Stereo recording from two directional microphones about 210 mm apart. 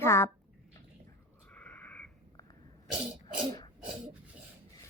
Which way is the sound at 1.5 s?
5° left (ahead or behind).